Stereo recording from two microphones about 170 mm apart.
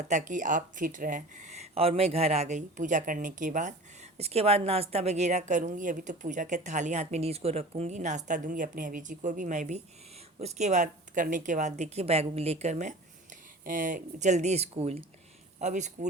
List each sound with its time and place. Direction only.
0.0 s speech: 45° right (ahead or behind)